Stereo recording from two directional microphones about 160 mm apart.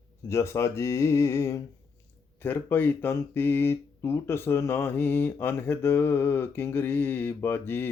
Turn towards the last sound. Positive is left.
turn(degrees=15)  # may be behind; listen again after turning